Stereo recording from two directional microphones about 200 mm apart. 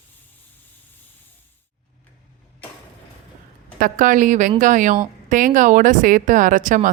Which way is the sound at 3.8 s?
40° right (ahead or behind).